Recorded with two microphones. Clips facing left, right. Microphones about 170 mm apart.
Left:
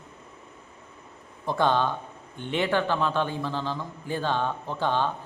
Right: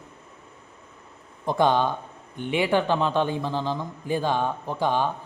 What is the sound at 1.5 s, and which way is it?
Speech, 15° right (ahead or behind).